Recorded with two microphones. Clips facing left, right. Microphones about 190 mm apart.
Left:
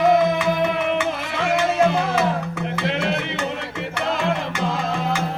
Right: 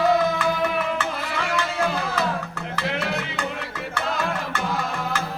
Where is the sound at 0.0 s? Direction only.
20° left (ahead or behind).